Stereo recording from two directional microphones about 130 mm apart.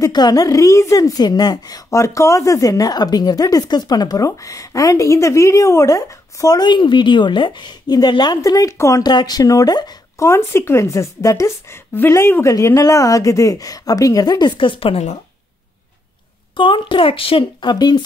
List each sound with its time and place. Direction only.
0.0 s a woman's voice: 30° left (ahead or behind); by 15.1 s 50° left (ahead or behind)
16.5 s a woman's voice: 40° left (ahead or behind)